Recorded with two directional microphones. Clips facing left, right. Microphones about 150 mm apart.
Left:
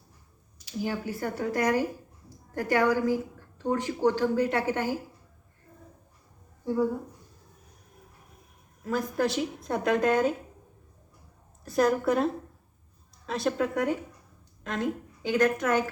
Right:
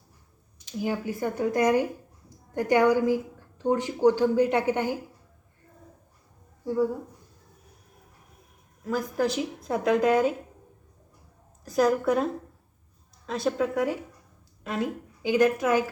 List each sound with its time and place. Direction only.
0.8 s a woman's voice: 15° right (ahead or behind)
8.8 s speech: centre (ahead or behind)
11.6 s a woman's voice: centre (ahead or behind)